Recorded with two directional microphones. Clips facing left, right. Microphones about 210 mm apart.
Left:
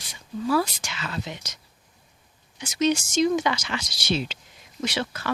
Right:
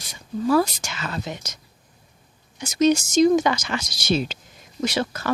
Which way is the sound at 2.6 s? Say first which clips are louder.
Right 5 dB; 40° right (ahead or behind).